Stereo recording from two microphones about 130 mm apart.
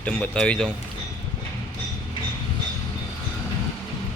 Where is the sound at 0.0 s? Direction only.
10° left (ahead or behind).